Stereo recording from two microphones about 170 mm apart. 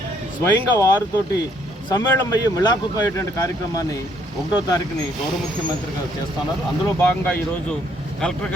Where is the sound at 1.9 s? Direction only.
25° left (ahead or behind).